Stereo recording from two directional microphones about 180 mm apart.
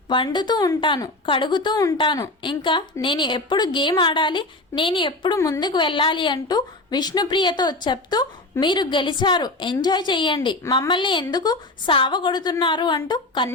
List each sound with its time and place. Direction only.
0.1 s a woman's voice: 25° left (ahead or behind)